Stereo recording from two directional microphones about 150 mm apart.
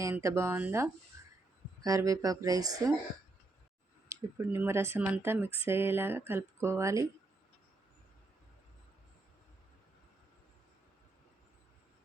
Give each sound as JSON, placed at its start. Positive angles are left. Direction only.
{"t": 0.0, "sound": "speech", "side_deg": -20}
{"t": 1.1, "sound": "a sound", "side_deg": -20}
{"t": 1.8, "sound": "speech", "side_deg": -25}
{"t": 4.1, "sound": "speech", "side_deg": -15}